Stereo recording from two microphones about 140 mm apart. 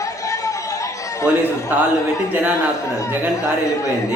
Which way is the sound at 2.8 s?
20° left (ahead or behind).